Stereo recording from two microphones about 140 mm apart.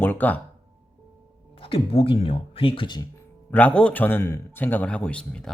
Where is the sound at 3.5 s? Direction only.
10° left (ahead or behind).